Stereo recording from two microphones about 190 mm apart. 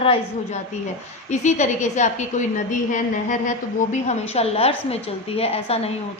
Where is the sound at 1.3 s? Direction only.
40° left (ahead or behind).